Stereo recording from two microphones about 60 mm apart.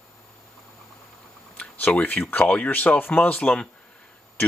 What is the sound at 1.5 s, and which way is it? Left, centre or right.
Speech, left.